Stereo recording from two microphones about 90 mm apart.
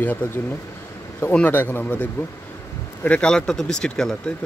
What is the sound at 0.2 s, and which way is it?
A man's voice, 15° left (ahead or behind).